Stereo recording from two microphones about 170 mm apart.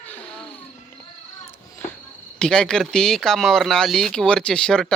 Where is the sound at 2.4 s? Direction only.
5° left (ahead or behind).